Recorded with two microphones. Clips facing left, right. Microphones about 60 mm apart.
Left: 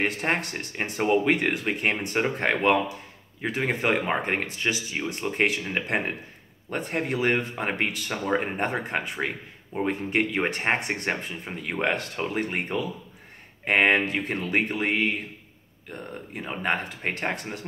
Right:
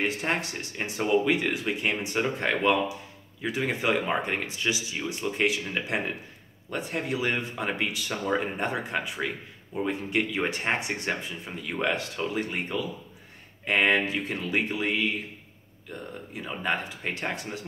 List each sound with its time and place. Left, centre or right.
0.0 s speech: left